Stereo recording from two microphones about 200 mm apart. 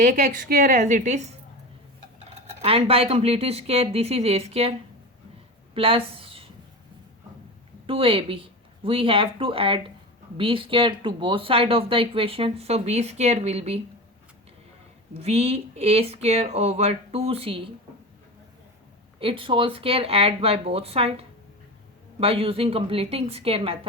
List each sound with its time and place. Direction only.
0.0 s speech: 40° right (ahead or behind)
0.8 s speech: 40° right (ahead or behind)
2.3 s speech: 30° right (ahead or behind)
5.7 s a sound: 25° right (ahead or behind)
7.9 s speech: 25° right (ahead or behind)
15.2 s speech: 30° right (ahead or behind)
19.2 s speech: 25° right (ahead or behind)